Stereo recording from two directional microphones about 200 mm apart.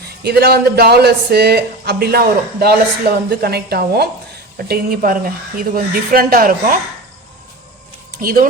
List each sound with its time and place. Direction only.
0.2 s speech: 55° right (ahead or behind)
8.2 s speech: 45° right (ahead or behind)